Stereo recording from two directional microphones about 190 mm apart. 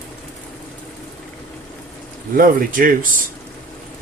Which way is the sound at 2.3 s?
50° right (ahead or behind).